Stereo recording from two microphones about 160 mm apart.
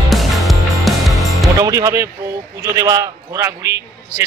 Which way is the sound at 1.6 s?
20° right (ahead or behind).